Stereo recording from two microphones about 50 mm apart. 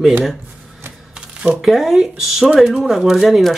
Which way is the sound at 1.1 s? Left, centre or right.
Centre.